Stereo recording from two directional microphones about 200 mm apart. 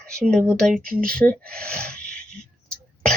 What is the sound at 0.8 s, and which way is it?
Speech, 45° right (ahead or behind).